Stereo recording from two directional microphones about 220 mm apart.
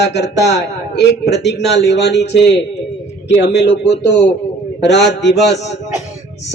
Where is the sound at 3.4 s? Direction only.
50° left (ahead or behind).